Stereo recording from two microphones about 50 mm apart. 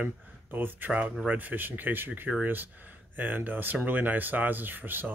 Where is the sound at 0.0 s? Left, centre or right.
Right.